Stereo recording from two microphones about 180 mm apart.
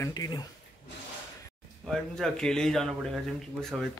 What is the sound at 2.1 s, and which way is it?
Speech, 5° left (ahead or behind).